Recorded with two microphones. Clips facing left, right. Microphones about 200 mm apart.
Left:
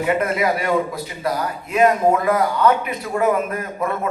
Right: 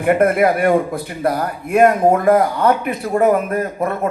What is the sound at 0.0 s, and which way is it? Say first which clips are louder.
A man's voice: right 6 dB; 55° right (ahead or behind).